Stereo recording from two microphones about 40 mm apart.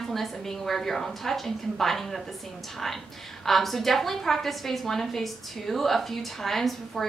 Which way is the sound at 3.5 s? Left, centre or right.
Centre.